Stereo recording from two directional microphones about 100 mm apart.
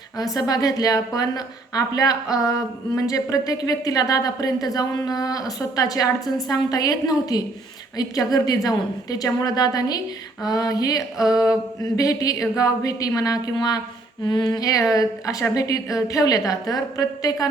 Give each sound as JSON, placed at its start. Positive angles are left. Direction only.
{"t": 0.2, "sound": "speech", "side_deg": 40}